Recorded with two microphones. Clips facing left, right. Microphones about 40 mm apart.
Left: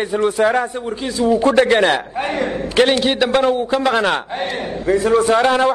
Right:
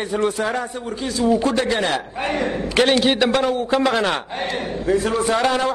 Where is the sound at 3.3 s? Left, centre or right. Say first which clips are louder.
Left 4 dB; centre.